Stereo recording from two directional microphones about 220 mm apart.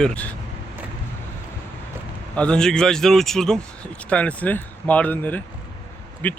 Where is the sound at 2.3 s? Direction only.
5° left (ahead or behind).